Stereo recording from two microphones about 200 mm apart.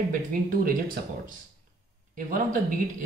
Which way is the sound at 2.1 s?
45° right (ahead or behind).